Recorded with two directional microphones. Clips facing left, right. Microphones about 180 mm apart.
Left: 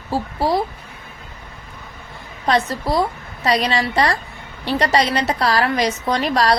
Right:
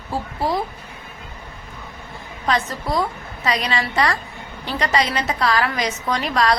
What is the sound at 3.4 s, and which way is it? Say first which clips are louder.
A woman's voice: left 4 dB; 35° left (ahead or behind).